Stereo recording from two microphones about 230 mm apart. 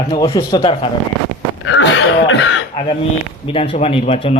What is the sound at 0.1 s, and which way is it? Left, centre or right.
Speech, centre.